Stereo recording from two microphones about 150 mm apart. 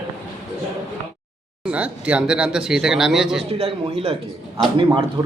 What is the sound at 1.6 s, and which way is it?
A man's voice, 10° right (ahead or behind).